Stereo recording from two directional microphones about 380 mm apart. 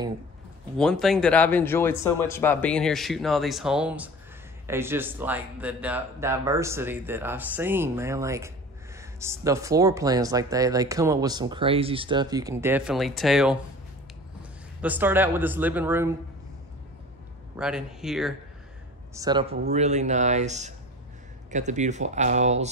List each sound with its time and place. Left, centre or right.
0.7 s speech: centre
14.8 s speech: centre
17.6 s speech: centre